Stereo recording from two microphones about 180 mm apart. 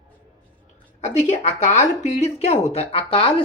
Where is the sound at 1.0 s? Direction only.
40° left (ahead or behind).